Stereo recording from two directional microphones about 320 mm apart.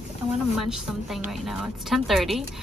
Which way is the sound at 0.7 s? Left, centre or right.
Centre.